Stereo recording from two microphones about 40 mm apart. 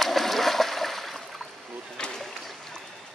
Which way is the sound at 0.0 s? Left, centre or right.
Centre.